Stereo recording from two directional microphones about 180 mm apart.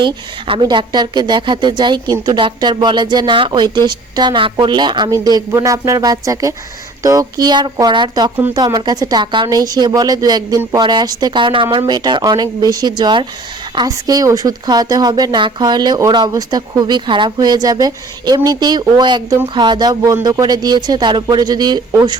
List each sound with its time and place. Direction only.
0.0 s speech: 25° right (ahead or behind)